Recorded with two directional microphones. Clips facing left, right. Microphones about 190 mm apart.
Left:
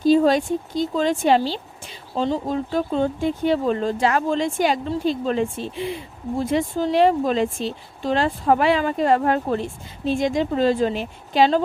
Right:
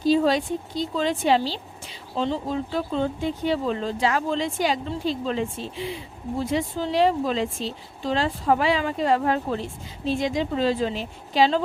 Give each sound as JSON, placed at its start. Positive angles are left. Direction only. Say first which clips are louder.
{"t": 0.0, "sound": "speech", "louder": "left 4 dB", "side_deg": 50}